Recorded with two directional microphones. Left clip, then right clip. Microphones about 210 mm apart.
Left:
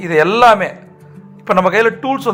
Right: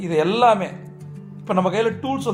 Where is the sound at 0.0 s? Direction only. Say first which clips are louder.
Left 7 dB; 20° left (ahead or behind).